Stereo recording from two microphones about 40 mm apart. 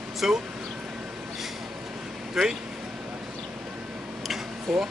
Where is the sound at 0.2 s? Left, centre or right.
Centre.